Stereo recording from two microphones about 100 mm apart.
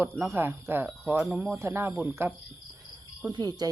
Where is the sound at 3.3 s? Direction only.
40° right (ahead or behind).